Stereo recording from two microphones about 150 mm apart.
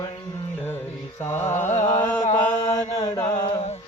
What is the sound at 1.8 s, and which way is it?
Chant, 20° left (ahead or behind).